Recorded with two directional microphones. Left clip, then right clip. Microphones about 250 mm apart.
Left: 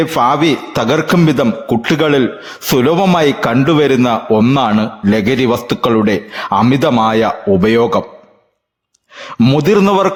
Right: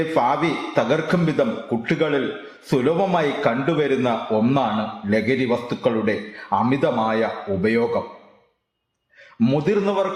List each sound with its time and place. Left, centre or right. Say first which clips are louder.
0.2 s a man's voice: left 8 dB; left
9.4 s a man's voice: left 9 dB; left